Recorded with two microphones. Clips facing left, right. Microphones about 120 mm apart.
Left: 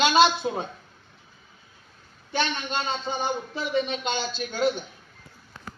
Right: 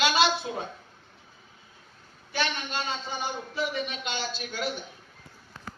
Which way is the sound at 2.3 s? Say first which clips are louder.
Left 3 dB; 30° left (ahead or behind).